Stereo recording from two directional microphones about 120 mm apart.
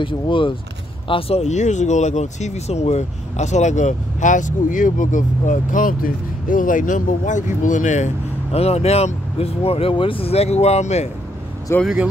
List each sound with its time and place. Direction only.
0.0 s speech: 45° left (ahead or behind)
1.4 s speech: 75° left (ahead or behind)
8.5 s speech: 60° left (ahead or behind)
11.8 s speech: 5° right (ahead or behind)